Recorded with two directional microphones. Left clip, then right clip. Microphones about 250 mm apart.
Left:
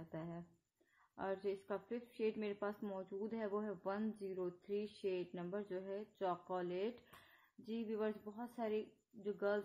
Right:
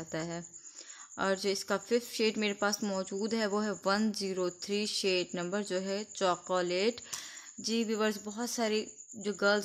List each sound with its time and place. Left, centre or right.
0.1 s speech: right